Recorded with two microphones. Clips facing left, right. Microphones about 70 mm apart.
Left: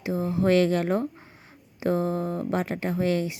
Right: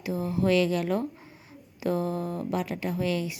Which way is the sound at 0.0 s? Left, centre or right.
Left.